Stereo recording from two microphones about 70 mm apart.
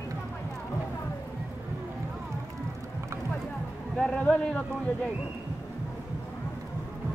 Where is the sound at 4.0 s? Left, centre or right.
Centre.